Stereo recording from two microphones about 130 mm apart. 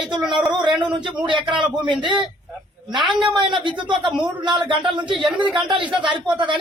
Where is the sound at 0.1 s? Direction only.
5° right (ahead or behind).